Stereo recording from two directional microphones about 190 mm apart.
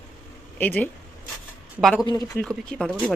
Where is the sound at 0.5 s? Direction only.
10° left (ahead or behind).